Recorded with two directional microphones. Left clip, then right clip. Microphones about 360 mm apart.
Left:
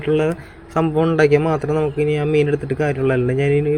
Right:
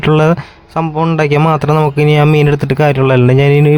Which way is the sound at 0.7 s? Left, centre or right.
Centre.